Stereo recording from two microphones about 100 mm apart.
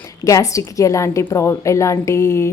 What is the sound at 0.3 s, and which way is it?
A woman's voice, 35° left (ahead or behind).